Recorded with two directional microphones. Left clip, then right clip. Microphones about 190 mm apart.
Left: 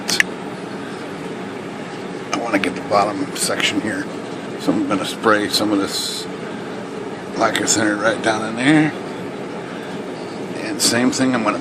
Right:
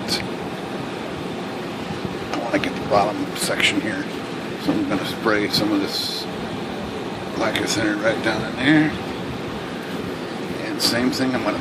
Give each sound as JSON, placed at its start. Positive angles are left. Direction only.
{"t": 2.3, "sound": "a sound", "side_deg": 25}
{"t": 3.5, "sound": "speech", "side_deg": 15}
{"t": 5.2, "sound": "speech", "side_deg": 30}
{"t": 7.3, "sound": "a man's voice", "side_deg": 30}
{"t": 10.8, "sound": "speech", "side_deg": 30}